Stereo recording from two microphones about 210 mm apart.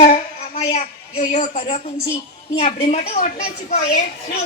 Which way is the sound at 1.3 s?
35° left (ahead or behind).